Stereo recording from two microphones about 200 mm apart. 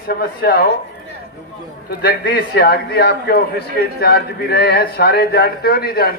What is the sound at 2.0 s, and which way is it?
Speech, 55° left (ahead or behind).